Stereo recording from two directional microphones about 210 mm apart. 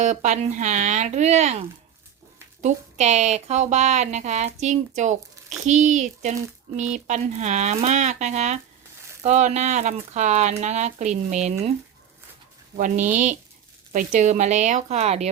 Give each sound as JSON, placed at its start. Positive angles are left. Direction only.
{"t": 0.0, "sound": "speech", "side_deg": -35}
{"t": 2.6, "sound": "speech", "side_deg": -35}
{"t": 12.7, "sound": "speech", "side_deg": -40}